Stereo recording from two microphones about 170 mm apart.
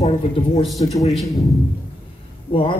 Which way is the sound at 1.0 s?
Centre (ahead or behind).